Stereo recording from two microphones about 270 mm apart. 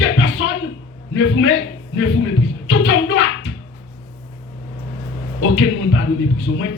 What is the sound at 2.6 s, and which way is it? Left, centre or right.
Speech, left.